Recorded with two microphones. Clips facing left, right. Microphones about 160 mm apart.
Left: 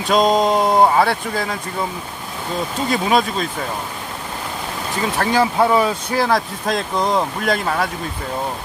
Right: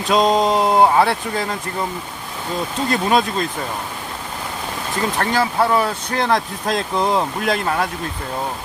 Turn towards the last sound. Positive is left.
turn(degrees=0)  # may be behind; listen again after turning